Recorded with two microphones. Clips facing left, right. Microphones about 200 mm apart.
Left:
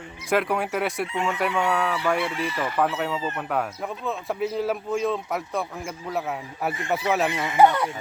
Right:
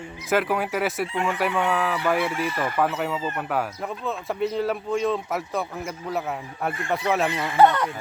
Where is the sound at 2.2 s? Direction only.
50° right (ahead or behind).